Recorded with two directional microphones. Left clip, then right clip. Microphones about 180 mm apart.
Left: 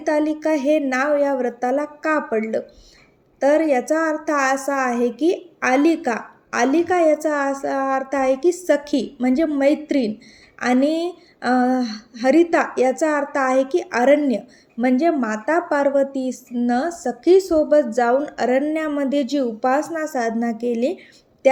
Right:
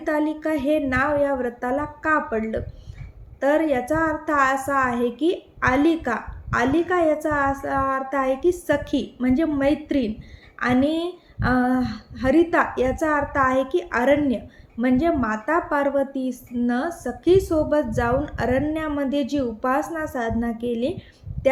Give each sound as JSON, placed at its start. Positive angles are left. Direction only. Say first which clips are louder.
{"t": 0.0, "sound": "a woman's voice", "louder": "left 4 dB", "side_deg": 30}